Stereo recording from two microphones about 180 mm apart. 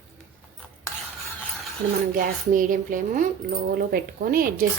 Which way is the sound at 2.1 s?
50° right (ahead or behind).